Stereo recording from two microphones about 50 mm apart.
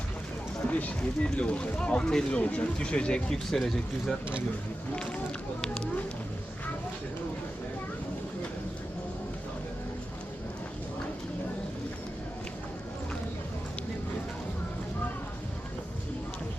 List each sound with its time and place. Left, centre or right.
0.6 s speech: left; by 4.2 s centre
5.6 s speech: centre